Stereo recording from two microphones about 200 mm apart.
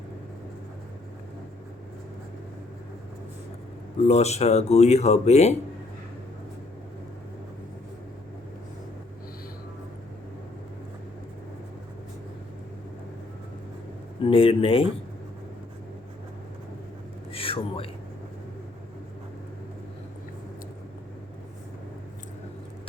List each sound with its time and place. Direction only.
4.0 s speech: 30° left (ahead or behind)
14.2 s speech: 25° left (ahead or behind)
17.3 s a sound: 30° left (ahead or behind)